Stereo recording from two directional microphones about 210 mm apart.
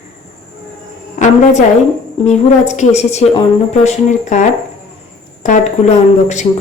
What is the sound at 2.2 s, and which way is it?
A woman's voice, 30° left (ahead or behind).